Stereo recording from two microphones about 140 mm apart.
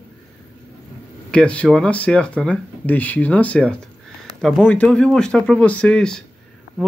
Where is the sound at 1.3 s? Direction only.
10° left (ahead or behind).